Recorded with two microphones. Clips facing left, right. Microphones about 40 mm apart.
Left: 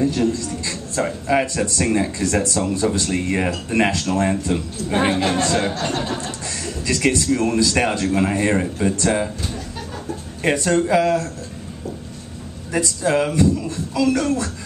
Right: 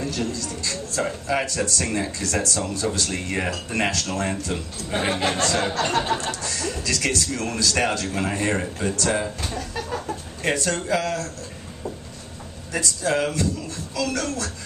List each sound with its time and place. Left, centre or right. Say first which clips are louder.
0.0 s a man's voice: left 8 dB; left
5.9 s chuckle: right 2 dB; right
6.4 s speech: left 1 dB; left
10.4 s speech: left 6 dB; centre
12.7 s speech: left 4 dB; centre